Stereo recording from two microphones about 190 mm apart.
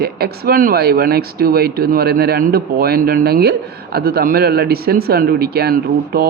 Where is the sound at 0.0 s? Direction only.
55° right (ahead or behind).